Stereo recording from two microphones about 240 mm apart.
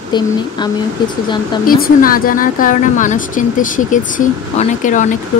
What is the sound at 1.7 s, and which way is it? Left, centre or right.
Speech, left.